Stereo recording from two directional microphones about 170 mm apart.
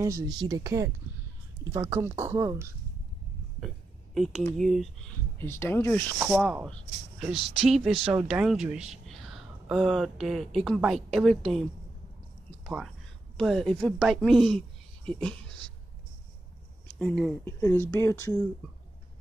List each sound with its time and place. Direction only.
0.0 s speech: 20° right (ahead or behind)
3.6 s a sound: centre (ahead or behind)
4.6 s speech: centre (ahead or behind)
5.4 s speech: 15° left (ahead or behind)
6.1 s speech: 10° right (ahead or behind)
12.6 s speech: centre (ahead or behind)
17.0 s speech: centre (ahead or behind)
17.5 s speech: 15° left (ahead or behind)